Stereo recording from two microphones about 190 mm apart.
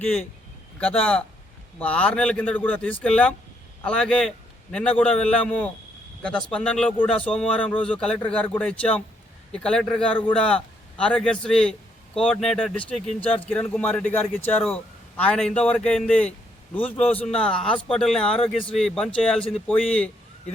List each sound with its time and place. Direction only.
0.0 s a man's voice: 5° left (ahead or behind)
17.0 s a man's voice: 30° left (ahead or behind)
17.3 s a man's voice: 5° left (ahead or behind)